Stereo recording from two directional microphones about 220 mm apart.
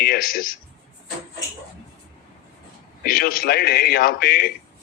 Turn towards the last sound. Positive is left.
turn(degrees=45)  # may be behind; listen again after turning